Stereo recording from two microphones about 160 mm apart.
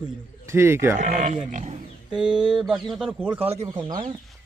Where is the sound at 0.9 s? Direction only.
55° right (ahead or behind).